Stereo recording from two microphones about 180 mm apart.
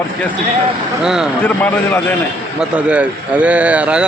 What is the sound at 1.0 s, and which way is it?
Speech, 5° right (ahead or behind).